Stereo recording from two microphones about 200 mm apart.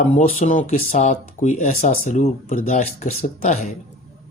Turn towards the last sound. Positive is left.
turn(degrees=35)  # may be behind; listen again after turning